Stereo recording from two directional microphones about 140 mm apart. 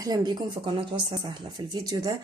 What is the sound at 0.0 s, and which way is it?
Speech, 30° right (ahead or behind).